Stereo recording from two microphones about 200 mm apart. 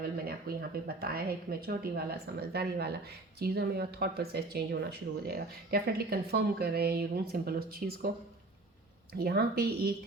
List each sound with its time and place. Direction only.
0.3 s speech: 50° right (ahead or behind)
9.1 s speech: 50° right (ahead or behind)